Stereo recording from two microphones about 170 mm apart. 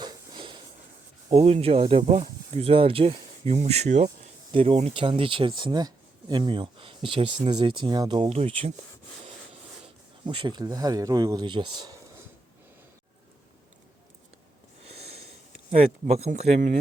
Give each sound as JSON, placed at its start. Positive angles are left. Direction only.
{"t": 0.0, "sound": "a sound", "side_deg": -25}
{"t": 1.3, "sound": "speech", "side_deg": -35}
{"t": 9.8, "sound": "speech", "side_deg": -30}
{"t": 15.7, "sound": "speech", "side_deg": -40}